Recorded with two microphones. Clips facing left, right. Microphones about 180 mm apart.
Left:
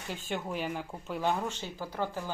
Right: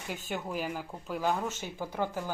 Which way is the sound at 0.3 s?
Centre (ahead or behind).